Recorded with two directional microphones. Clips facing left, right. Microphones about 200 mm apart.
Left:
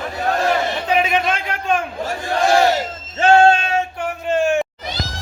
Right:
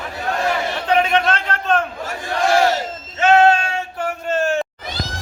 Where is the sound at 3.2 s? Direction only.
30° left (ahead or behind).